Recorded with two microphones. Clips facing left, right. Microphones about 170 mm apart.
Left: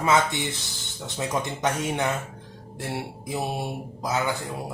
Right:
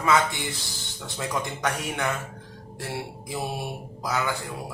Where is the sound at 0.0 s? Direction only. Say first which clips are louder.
Left 1 dB; 20° left (ahead or behind).